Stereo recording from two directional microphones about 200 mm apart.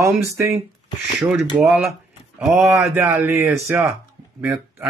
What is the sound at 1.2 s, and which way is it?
Speech, centre (ahead or behind).